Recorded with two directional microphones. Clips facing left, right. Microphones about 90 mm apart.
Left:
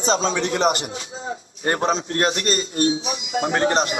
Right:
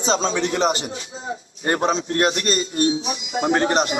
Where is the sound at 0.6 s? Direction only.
45° left (ahead or behind).